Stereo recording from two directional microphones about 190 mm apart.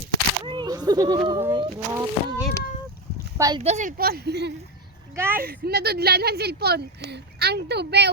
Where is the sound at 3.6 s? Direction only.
40° right (ahead or behind); by 4.5 s 60° right (ahead or behind).